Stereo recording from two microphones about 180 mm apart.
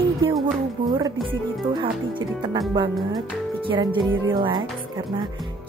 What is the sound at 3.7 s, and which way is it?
Music, 25° right (ahead or behind).